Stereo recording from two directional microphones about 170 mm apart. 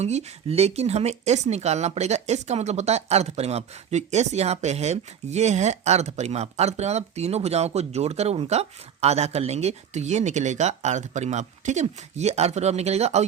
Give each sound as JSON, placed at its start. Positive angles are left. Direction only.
{"t": 0.0, "sound": "speech", "side_deg": -40}